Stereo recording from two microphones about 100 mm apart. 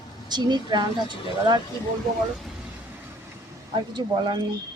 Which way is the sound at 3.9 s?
50° right (ahead or behind).